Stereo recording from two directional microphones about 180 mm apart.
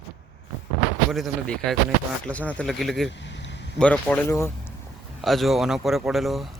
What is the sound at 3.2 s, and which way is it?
Vehicle, 85° left.